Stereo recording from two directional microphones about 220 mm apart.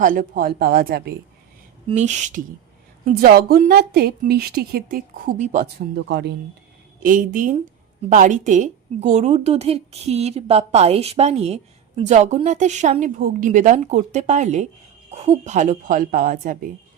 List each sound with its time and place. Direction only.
0.0 s a woman's voice: 40° right (ahead or behind)
1.9 s a woman's voice: 30° right (ahead or behind)
3.2 s a woman's voice: 45° right (ahead or behind)
6.1 s a woman's voice: 50° right (ahead or behind)
7.0 s a woman's voice: 40° right (ahead or behind)